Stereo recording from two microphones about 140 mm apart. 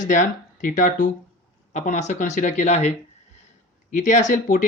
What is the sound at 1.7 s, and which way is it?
Speech, 55° left (ahead or behind).